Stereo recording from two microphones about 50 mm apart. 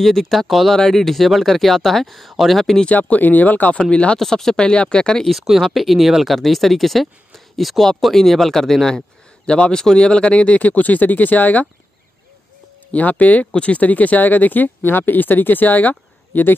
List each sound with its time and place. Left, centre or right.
0.0 s speech: centre
3.0 s speech: left
3.8 s speech: left
4.2 s speech: centre
4.6 s speech: centre
5.5 s speech: centre; by 11.6 s left
12.9 s speech: left